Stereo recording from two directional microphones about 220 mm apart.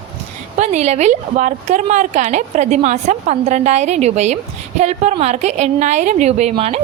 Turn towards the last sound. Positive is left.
turn(degrees=-30)  # may be behind; listen again after turning